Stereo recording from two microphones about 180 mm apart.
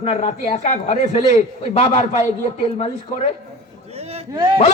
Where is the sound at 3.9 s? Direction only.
35° right (ahead or behind).